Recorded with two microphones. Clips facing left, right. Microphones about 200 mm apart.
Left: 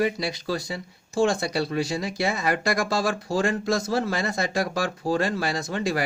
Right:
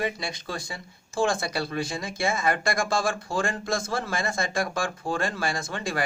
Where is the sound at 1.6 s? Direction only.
35° left (ahead or behind).